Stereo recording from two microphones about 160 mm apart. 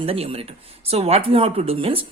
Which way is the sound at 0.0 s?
35° right (ahead or behind).